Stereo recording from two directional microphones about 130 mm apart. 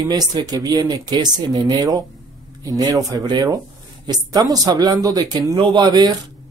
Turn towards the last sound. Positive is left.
turn(degrees=-35)  # may be behind; listen again after turning